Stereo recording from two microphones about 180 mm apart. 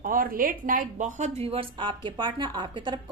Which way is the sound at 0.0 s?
50° right (ahead or behind).